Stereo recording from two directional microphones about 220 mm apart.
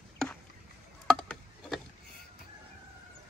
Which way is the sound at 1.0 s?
Centre (ahead or behind).